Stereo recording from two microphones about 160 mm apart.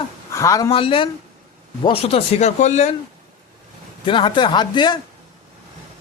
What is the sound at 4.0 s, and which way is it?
Speech, 30° left (ahead or behind).